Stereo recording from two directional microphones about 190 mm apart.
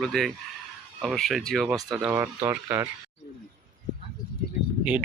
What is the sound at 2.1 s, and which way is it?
Speech, 15° right (ahead or behind).